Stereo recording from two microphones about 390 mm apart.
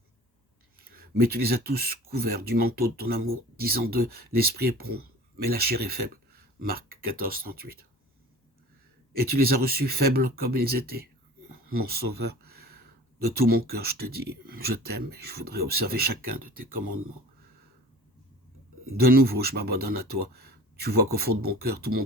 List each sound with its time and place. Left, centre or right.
0.8 s speech: right
9.2 s speech: right
18.9 s speech: right